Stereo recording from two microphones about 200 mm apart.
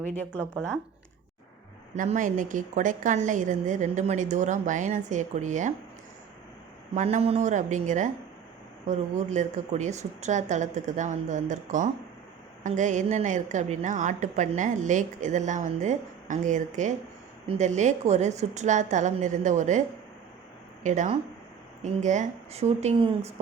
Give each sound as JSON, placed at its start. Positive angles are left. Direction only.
{"t": 2.0, "sound": "a woman's voice", "side_deg": -40}
{"t": 6.9, "sound": "a woman's voice", "side_deg": -35}
{"t": 9.3, "sound": "a woman's voice", "side_deg": -35}
{"t": 20.8, "sound": "a woman's voice", "side_deg": -40}